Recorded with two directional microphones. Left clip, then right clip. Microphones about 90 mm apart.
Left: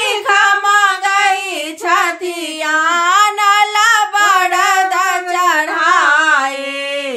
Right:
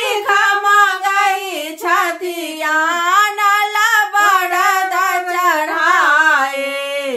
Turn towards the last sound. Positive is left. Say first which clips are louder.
# left 1 dB
turn(degrees=45)  # may be behind; listen again after turning